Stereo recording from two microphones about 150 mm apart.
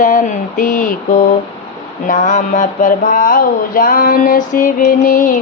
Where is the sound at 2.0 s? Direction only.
55° left (ahead or behind).